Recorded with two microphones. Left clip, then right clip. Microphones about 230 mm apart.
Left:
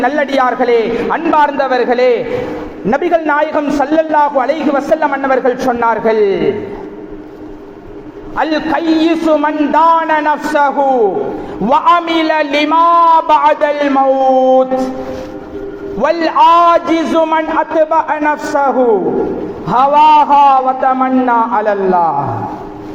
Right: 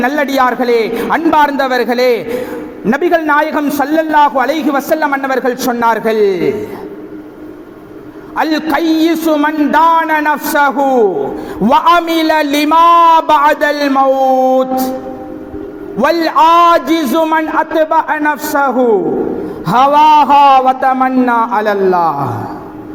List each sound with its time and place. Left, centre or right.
0.0 s a man's voice: right
8.4 s a man's voice: right
16.0 s a man's voice: right